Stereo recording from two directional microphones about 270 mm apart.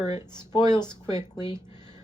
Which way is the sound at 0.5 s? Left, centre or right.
Centre.